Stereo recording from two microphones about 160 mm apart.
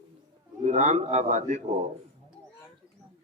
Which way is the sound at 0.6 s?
45° right (ahead or behind).